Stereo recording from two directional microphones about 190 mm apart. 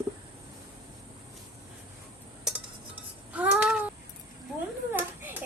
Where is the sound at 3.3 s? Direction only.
5° right (ahead or behind).